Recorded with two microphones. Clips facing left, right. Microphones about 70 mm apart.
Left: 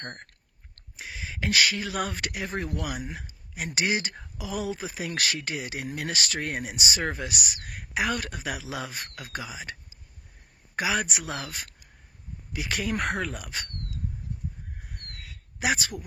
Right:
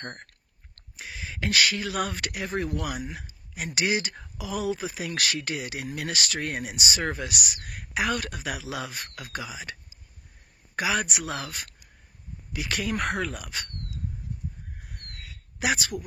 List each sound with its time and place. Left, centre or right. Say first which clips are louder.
0.9 s speech: even; centre
10.8 s speech: right 1 dB; left
15.6 s speech: even; left